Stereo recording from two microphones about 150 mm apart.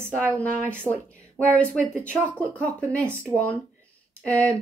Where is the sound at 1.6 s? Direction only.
10° left (ahead or behind).